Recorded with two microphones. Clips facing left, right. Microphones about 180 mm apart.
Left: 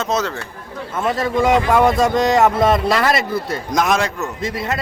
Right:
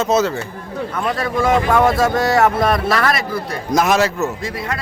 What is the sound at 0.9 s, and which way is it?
A man's voice, 20° left (ahead or behind).